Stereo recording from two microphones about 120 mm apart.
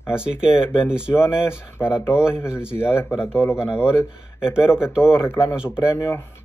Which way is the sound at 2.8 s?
20° left (ahead or behind).